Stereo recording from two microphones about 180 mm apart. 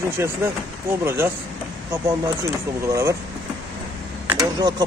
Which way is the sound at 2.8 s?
15° right (ahead or behind).